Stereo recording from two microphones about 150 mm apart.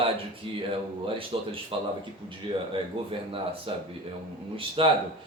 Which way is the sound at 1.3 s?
40° right (ahead or behind).